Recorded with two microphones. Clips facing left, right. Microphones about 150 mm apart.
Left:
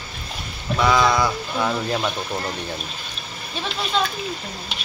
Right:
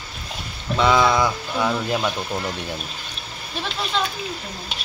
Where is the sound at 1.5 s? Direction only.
Centre (ahead or behind).